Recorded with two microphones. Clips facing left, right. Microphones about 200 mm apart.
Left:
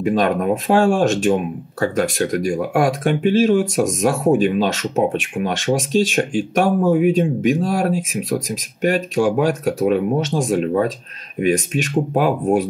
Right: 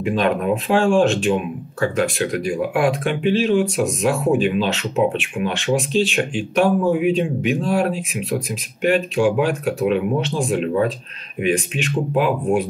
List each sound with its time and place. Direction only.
0.0 s speech: 45° left (ahead or behind)